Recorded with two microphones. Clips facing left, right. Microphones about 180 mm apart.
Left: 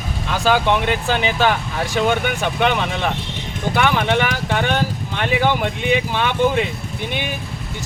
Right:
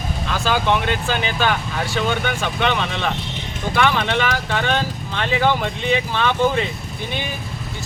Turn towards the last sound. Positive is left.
turn(degrees=15)  # may be behind; listen again after turning